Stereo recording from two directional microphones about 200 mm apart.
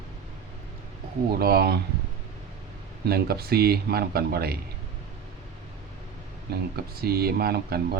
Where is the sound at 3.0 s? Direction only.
50° right (ahead or behind).